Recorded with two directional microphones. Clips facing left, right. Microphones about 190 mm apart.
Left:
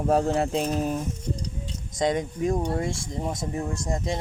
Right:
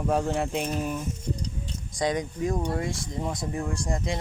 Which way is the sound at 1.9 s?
25° left (ahead or behind).